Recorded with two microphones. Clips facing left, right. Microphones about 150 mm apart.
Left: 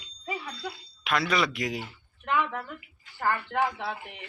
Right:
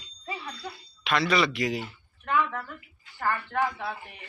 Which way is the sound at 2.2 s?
20° left (ahead or behind).